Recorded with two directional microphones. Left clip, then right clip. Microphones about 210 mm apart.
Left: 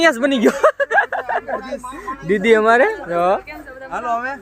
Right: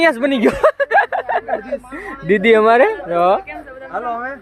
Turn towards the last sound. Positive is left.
turn(degrees=30)  # may be behind; listen again after turning